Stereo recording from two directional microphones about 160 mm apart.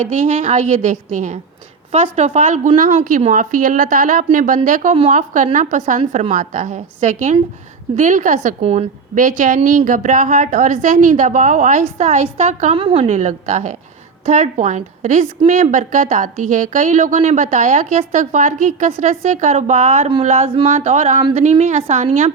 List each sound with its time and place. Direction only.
0.0 s a woman's voice: 50° right (ahead or behind)
8.6 s a woman's voice: 40° right (ahead or behind)
9.1 s a woman's voice: 55° right (ahead or behind)
21.2 s a woman's voice: 35° right (ahead or behind)
21.4 s a woman's voice: 45° right (ahead or behind)